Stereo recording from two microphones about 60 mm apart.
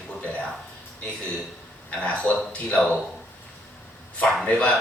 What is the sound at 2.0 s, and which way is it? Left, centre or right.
Speech, left.